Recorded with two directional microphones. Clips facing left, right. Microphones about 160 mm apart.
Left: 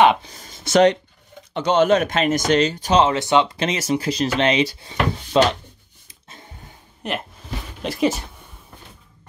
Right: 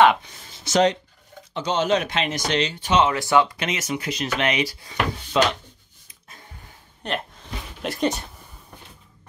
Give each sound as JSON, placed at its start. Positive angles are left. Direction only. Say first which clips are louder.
{"t": 0.7, "sound": "speech", "louder": "left 4 dB", "side_deg": 60}
{"t": 3.2, "sound": "speech", "louder": "left 2 dB", "side_deg": 20}
{"t": 7.0, "sound": "speech", "louder": "left 1 dB", "side_deg": 5}